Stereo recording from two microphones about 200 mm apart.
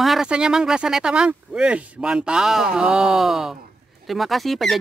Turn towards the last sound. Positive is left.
turn(degrees=0)  # may be behind; listen again after turning